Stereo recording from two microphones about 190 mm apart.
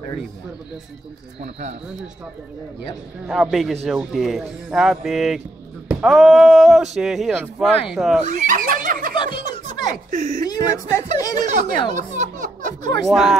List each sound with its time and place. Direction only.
1.4 s speech: 40° right (ahead or behind)
3.3 s speech: centre (ahead or behind)
8.3 s a sound: 40° right (ahead or behind)
10.1 s speech: 40° right (ahead or behind)
10.4 s a woman's voice: 20° left (ahead or behind)
11.4 s a sound: 45° right (ahead or behind)
13.0 s speech: centre (ahead or behind)